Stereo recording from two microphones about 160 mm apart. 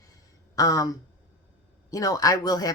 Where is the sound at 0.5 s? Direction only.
20° left (ahead or behind).